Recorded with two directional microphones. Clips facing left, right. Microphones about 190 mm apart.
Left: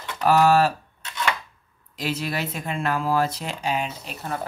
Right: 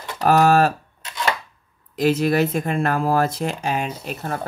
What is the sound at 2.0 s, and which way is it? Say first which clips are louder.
Speech: right 10 dB; 50° right (ahead or behind).